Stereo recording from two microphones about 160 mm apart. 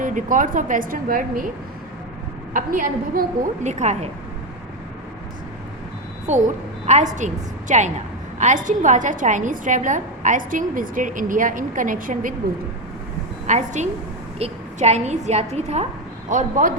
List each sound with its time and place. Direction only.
0.0 s a woman's voice: 55° right (ahead or behind)
2.5 s a woman's voice: 55° right (ahead or behind)
6.3 s a woman's voice: 45° right (ahead or behind)
13.5 s a woman's voice: 50° right (ahead or behind)
16.3 s a woman's voice: 55° right (ahead or behind)